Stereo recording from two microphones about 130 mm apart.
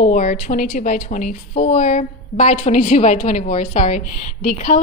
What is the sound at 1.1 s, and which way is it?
Speech, 75° left (ahead or behind).